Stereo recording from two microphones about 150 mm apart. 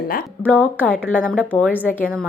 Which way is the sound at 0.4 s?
10° left (ahead or behind).